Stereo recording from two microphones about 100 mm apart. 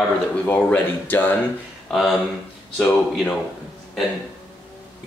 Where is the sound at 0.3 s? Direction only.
15° left (ahead or behind).